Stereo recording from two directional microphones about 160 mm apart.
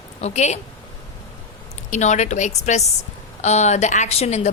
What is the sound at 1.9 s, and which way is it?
A woman's voice, 50° left (ahead or behind).